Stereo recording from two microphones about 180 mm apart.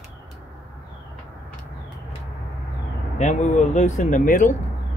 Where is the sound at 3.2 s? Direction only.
40° left (ahead or behind).